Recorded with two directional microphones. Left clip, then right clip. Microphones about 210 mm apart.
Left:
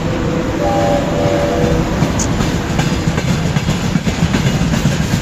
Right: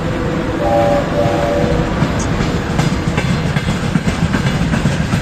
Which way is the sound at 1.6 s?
35° left (ahead or behind).